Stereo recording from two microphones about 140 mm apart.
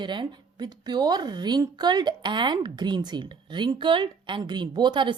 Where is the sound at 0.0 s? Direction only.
35° right (ahead or behind).